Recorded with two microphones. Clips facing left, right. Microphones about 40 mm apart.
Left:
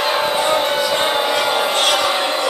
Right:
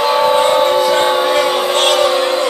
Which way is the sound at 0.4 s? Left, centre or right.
Right.